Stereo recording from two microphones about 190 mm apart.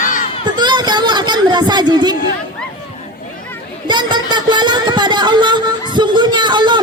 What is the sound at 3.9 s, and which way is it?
Music, 25° right (ahead or behind).